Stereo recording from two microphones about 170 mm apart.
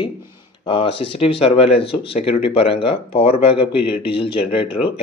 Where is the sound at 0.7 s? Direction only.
30° left (ahead or behind).